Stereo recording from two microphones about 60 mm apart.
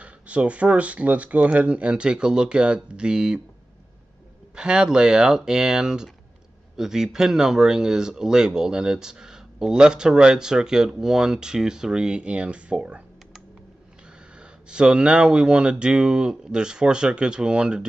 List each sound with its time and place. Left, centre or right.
0.0 s speech: right
4.6 s speech: centre
14.7 s speech: centre